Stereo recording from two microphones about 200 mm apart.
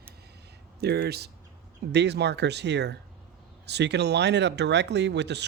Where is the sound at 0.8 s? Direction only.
55° right (ahead or behind).